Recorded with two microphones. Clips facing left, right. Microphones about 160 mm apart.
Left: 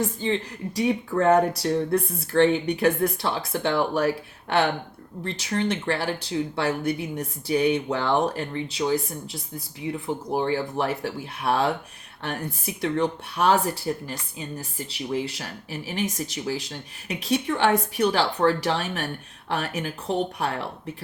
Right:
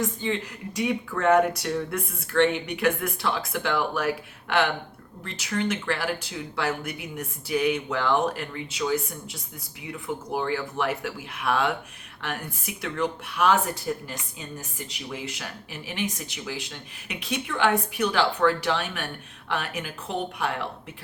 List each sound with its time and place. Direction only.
0.0 s speech: 35° left (ahead or behind)